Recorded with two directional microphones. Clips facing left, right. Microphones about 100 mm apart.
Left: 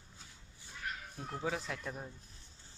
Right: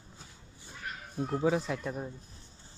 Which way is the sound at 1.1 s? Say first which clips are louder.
Right 11 dB; 20° right (ahead or behind).